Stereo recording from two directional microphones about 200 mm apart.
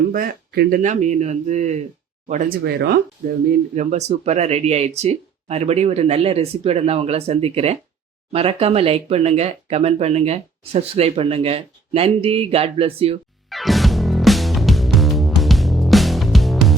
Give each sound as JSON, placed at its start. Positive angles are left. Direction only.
{"t": 0.1, "sound": "speech", "side_deg": -50}
{"t": 0.8, "sound": "speech", "side_deg": -35}
{"t": 2.6, "sound": "speech", "side_deg": -55}
{"t": 3.8, "sound": "speech", "side_deg": -35}
{"t": 13.5, "sound": "music", "side_deg": 0}